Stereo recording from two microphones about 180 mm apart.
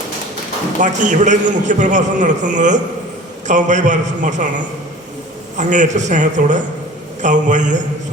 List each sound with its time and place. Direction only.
0.8 s a man's voice: 45° right (ahead or behind)